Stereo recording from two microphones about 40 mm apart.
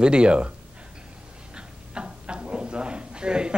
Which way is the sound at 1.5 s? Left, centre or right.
Right.